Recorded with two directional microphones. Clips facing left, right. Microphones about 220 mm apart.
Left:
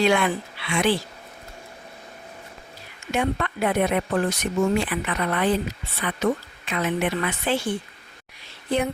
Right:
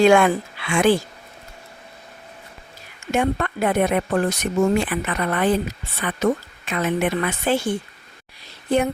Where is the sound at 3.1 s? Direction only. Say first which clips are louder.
Right 3 dB; 45° right (ahead or behind).